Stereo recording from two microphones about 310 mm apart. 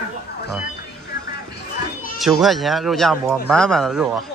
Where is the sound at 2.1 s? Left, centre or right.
Centre.